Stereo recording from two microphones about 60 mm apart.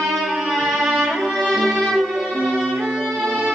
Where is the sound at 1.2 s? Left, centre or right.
Centre.